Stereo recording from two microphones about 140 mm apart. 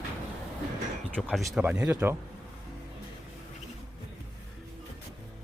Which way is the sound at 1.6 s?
10° right (ahead or behind).